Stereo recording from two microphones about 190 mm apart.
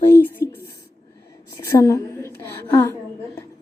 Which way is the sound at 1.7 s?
15° left (ahead or behind).